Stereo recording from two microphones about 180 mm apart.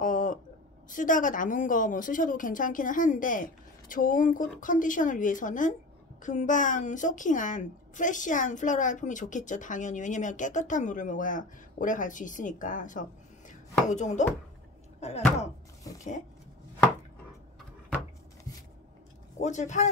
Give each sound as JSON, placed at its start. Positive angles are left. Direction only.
{"t": 0.0, "sound": "a sound", "side_deg": 45}
{"t": 0.8, "sound": "a woman's voice", "side_deg": 45}
{"t": 13.5, "sound": "chopping", "side_deg": 40}
{"t": 15.0, "sound": "speech", "side_deg": 35}
{"t": 19.3, "sound": "speech", "side_deg": 40}